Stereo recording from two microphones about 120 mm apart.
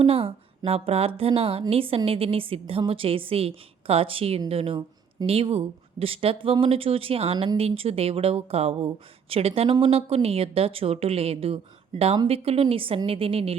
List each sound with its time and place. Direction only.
0.0 s a woman's voice: 50° right (ahead or behind)